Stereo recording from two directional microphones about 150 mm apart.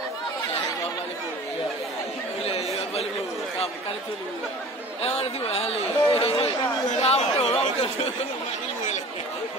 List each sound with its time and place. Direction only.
2.4 s chatter: 45° left (ahead or behind)
5.0 s speech: 40° left (ahead or behind)